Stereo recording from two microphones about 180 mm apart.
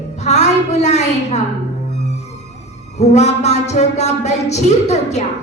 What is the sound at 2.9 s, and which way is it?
Speech, 40° left (ahead or behind).